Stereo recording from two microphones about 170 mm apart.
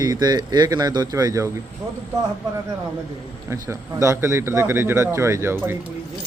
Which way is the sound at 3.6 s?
15° right (ahead or behind).